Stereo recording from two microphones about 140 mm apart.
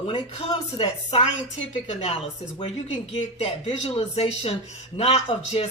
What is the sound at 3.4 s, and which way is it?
Speech, 45° left (ahead or behind).